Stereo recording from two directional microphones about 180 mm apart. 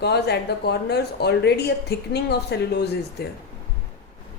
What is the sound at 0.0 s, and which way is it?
A woman's voice, 65° left (ahead or behind).